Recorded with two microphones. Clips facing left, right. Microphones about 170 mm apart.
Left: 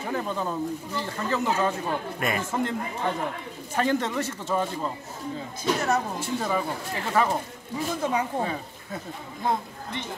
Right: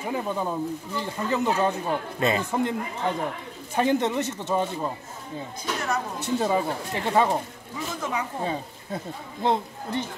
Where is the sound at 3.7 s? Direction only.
20° right (ahead or behind).